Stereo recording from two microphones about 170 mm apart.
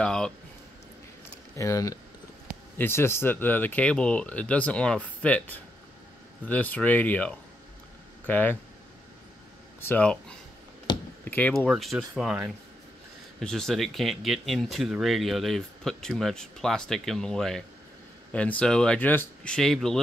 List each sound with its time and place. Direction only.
0.0 s a sound: 5° left (ahead or behind)
1.6 s speech: 20° left (ahead or behind)
9.8 s speech: 10° left (ahead or behind)
10.9 s a sound: 25° left (ahead or behind)
11.2 s speech: 10° left (ahead or behind)
11.5 s speech: centre (ahead or behind)